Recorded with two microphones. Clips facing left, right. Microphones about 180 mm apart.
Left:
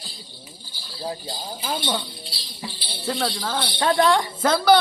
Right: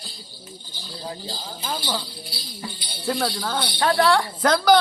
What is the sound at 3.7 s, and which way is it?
Speech, 25° left (ahead or behind).